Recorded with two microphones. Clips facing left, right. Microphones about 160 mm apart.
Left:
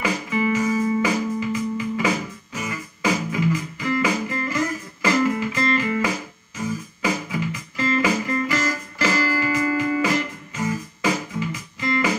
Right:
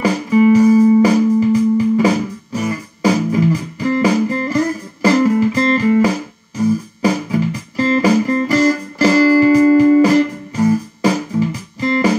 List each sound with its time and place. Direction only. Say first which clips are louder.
0.0 s music: right 11 dB; 35° right (ahead or behind)